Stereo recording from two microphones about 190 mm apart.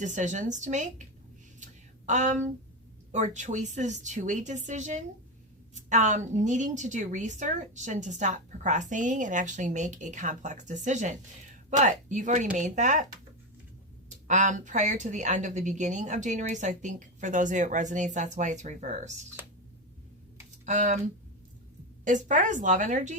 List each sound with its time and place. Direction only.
0.0 s a woman's voice: 40° right (ahead or behind)
1.5 s a sound: 40° right (ahead or behind)
3.1 s a woman's voice: 40° right (ahead or behind)
14.3 s a woman's voice: 40° right (ahead or behind)
20.7 s a woman's voice: 40° right (ahead or behind)
22.0 s a woman's voice: 40° right (ahead or behind)